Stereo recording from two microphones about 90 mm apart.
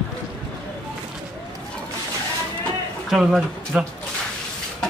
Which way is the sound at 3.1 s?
5° right (ahead or behind).